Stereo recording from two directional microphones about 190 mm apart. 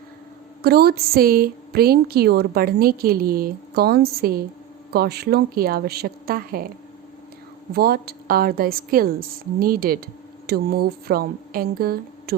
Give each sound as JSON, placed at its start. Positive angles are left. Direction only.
{"t": 0.6, "sound": "a woman's voice", "side_deg": -55}
{"t": 7.7, "sound": "a woman's voice", "side_deg": -55}